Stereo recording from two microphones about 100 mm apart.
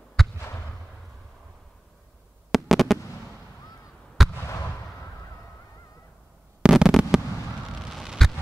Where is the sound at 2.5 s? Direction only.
Centre (ahead or behind).